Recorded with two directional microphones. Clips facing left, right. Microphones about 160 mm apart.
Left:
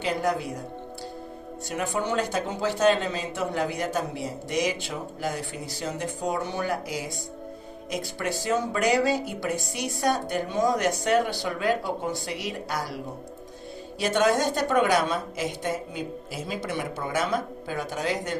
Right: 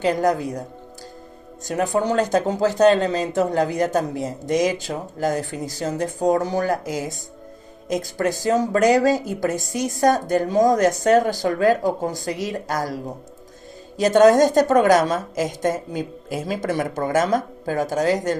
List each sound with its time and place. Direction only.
0.0 s speech: 40° right (ahead or behind)
1.6 s a woman's voice: 40° right (ahead or behind)
14.0 s a woman's voice: 40° right (ahead or behind)